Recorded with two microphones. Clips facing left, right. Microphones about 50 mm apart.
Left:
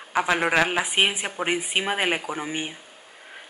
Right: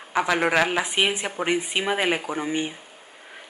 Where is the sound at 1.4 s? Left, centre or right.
Centre.